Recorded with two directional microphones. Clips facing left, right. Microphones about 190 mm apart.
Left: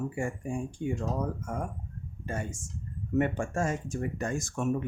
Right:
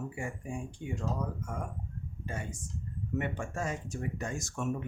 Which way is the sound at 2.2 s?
45° left (ahead or behind).